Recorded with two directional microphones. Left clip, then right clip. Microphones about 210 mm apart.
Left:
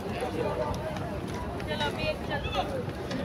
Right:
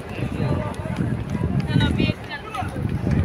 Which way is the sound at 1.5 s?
50° right (ahead or behind).